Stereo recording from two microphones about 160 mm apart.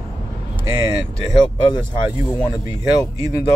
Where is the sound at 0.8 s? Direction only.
20° right (ahead or behind).